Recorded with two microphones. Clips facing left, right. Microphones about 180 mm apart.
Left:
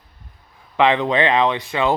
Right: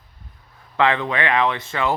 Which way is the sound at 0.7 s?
15° left (ahead or behind).